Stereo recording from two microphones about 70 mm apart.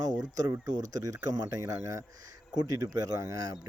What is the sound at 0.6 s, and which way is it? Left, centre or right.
Speech, right.